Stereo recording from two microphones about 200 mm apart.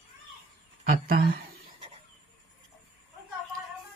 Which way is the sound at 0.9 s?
45° right (ahead or behind).